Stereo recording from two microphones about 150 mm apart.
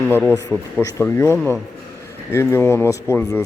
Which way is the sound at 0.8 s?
15° left (ahead or behind).